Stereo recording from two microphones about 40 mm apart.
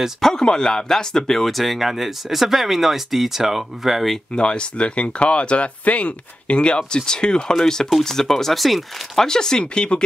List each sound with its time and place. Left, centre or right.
0.2 s speech: centre
1.5 s speech: centre
4.4 s speech: left; by 9.2 s centre
9.2 s speech: centre